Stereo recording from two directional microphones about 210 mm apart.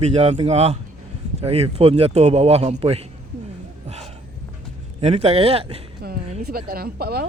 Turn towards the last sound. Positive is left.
turn(degrees=-50)  # may be behind; listen again after turning